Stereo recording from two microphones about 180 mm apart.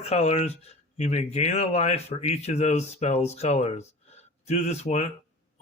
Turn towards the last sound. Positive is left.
turn(degrees=40)  # may be behind; listen again after turning